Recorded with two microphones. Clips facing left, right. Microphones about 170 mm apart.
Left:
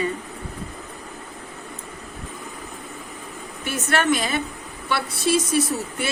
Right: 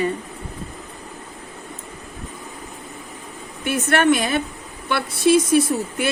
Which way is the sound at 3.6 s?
55° right (ahead or behind).